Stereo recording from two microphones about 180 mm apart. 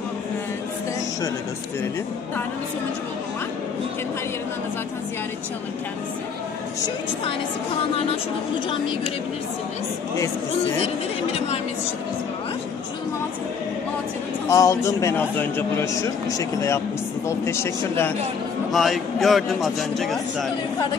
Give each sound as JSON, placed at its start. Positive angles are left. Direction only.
{"t": 14.5, "sound": "a man's voice", "side_deg": 20}
{"t": 18.7, "sound": "a man's voice", "side_deg": 0}